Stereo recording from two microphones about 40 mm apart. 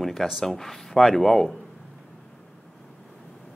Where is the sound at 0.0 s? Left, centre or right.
Centre.